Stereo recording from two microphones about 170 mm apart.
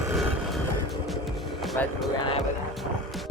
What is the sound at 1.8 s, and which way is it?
Music, 10° left (ahead or behind).